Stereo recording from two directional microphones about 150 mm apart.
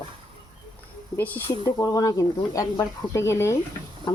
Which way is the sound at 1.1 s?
10° left (ahead or behind).